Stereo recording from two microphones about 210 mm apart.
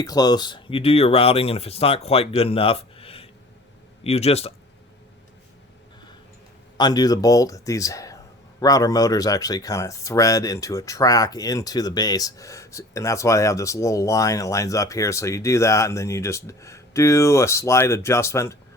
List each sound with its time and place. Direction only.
0.0 s speech: 20° left (ahead or behind)
6.7 s speech: 20° left (ahead or behind)